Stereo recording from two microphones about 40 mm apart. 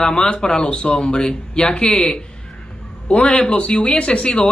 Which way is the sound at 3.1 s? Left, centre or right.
Centre.